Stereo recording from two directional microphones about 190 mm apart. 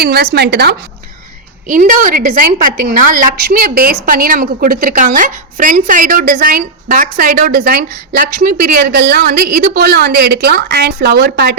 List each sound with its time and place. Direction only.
0.0 s speech: 55° right (ahead or behind)
1.6 s a woman's voice: 45° right (ahead or behind); by 11.5 s 60° right (ahead or behind)